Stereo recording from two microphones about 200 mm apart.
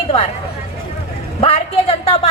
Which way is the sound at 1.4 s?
30° left (ahead or behind).